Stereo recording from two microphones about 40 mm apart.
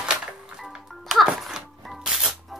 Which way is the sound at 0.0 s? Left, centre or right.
Centre.